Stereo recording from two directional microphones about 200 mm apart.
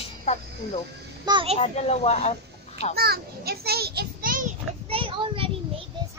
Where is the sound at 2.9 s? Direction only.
50° right (ahead or behind).